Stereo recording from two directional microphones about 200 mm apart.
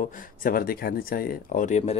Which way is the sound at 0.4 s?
45° left (ahead or behind).